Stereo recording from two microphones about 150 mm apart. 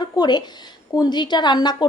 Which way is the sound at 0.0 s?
30° left (ahead or behind).